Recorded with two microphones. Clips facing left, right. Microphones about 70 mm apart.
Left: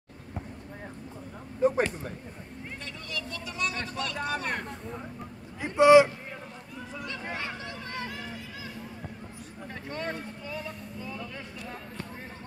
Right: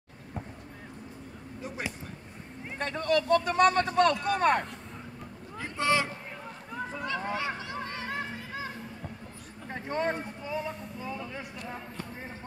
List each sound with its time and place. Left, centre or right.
1.6 s speech: left
2.8 s speech: right
5.6 s speech: centre
6.7 s a sound: right
7.7 s music: right
9.7 s speech: right